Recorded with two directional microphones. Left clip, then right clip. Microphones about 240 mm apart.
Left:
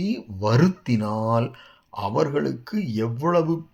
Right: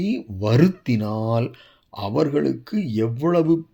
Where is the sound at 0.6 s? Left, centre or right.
Right.